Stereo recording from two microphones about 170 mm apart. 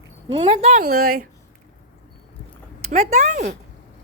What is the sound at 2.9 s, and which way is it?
Speech, 40° right (ahead or behind).